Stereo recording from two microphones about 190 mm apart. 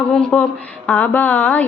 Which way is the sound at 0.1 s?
5° left (ahead or behind).